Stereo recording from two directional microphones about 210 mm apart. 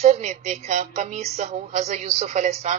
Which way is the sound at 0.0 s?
30° right (ahead or behind).